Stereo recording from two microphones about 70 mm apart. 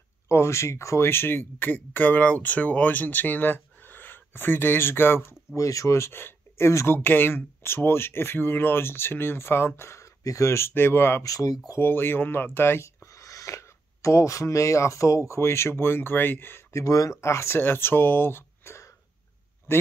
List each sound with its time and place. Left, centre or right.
0.3 s speech: left
5.6 s speech: left
7.0 s speech: left
11.2 s speech: left
11.8 s speech: left
13.0 s speech: left
16.7 s speech: left